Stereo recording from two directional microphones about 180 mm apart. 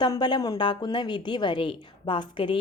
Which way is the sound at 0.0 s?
25° left (ahead or behind).